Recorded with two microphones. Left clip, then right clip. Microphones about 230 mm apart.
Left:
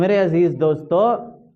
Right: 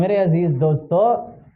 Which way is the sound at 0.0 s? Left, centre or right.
Left.